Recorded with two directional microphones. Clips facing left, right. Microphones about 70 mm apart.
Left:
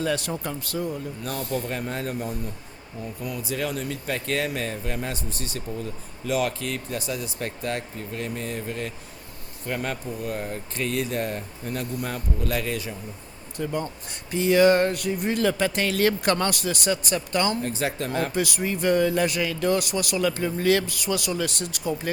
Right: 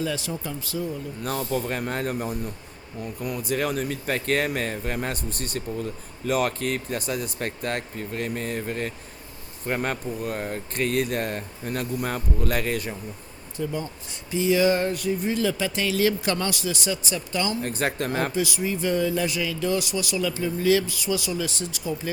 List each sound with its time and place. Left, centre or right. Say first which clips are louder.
0.0 s speech: left 2 dB; left
1.7 s speech: right 2 dB; right
13.6 s speech: left 1 dB; left
17.6 s speech: right 1 dB; right
18.3 s speech: even; left